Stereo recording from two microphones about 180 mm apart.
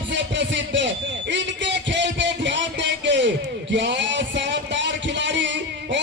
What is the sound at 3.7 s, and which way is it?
Music, 75° right (ahead or behind).